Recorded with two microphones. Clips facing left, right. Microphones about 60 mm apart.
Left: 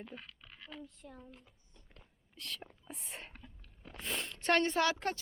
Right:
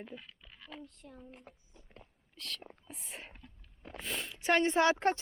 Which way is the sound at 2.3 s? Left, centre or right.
Centre.